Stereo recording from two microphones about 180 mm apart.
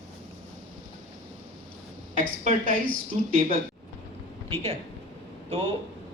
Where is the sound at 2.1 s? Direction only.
45° right (ahead or behind).